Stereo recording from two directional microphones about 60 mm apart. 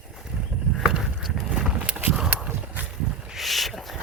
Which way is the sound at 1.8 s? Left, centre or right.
Right.